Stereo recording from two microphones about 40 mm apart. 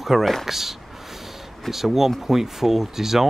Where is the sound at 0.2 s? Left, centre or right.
Centre.